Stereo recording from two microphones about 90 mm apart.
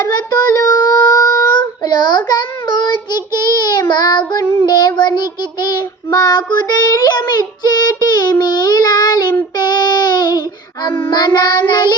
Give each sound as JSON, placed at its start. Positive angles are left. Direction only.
{"t": 0.0, "sound": "child singing", "side_deg": 40}